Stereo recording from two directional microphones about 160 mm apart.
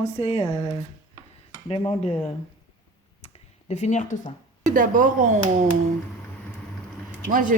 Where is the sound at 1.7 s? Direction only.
40° left (ahead or behind).